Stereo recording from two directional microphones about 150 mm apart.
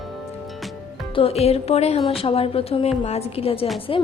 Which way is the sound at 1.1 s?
40° left (ahead or behind).